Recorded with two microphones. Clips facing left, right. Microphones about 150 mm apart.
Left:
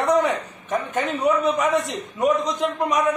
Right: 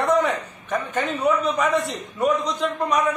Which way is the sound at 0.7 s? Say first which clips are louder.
Left 1 dB; 15° left (ahead or behind).